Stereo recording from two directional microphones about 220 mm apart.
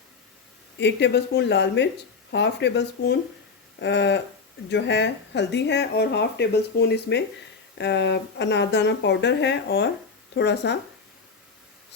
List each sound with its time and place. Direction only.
0.8 s speech: 50° left (ahead or behind)